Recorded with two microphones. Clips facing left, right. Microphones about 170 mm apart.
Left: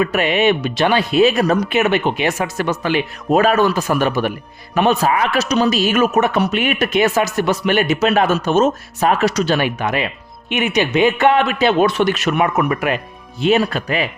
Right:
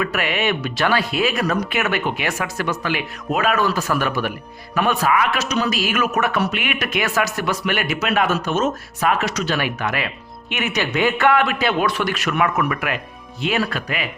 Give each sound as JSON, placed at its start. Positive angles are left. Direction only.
{"t": 0.0, "sound": "speech", "side_deg": 25}
{"t": 3.8, "sound": "speech", "side_deg": 20}